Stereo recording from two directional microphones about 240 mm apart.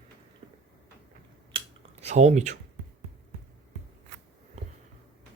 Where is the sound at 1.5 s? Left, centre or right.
Right.